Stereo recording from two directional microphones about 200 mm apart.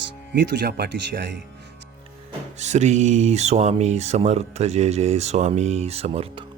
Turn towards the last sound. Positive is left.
turn(degrees=-30)  # may be behind; listen again after turning